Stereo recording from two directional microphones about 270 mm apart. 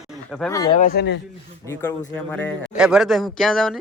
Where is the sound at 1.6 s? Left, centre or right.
Centre.